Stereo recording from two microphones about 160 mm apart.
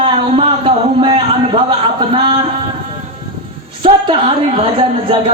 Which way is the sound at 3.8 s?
35° right (ahead or behind).